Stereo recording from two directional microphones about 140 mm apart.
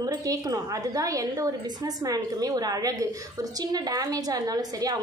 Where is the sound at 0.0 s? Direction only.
25° right (ahead or behind).